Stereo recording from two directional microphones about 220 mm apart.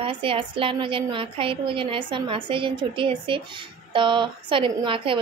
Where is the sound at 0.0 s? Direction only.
25° right (ahead or behind).